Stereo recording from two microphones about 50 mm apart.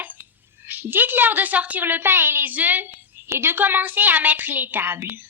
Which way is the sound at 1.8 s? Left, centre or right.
Right.